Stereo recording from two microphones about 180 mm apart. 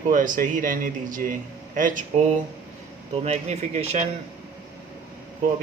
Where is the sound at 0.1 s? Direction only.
45° right (ahead or behind).